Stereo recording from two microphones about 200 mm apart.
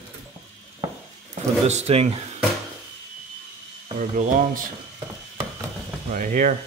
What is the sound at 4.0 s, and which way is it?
Speech, 40° right (ahead or behind).